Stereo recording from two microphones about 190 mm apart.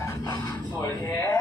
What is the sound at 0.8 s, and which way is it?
Music, 20° left (ahead or behind).